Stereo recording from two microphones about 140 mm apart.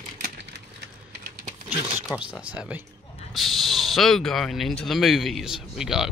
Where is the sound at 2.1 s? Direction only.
5° right (ahead or behind).